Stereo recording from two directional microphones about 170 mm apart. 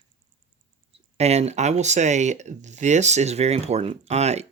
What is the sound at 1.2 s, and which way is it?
Speech, 40° right (ahead or behind).